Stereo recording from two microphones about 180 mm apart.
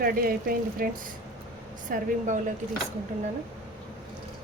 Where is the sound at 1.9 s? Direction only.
45° right (ahead or behind).